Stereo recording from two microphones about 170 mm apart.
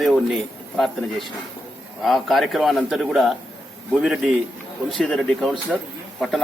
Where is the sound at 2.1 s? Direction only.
Centre (ahead or behind).